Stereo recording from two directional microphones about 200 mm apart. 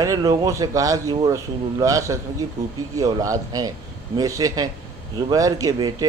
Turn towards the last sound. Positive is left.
turn(degrees=-20)  # may be behind; listen again after turning